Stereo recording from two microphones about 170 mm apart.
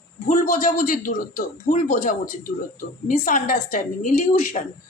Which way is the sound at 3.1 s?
45° left (ahead or behind).